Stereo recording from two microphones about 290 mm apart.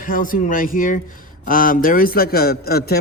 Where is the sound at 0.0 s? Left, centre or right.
Left.